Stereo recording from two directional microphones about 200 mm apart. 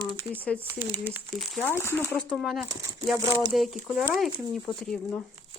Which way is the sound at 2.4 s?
Centre (ahead or behind).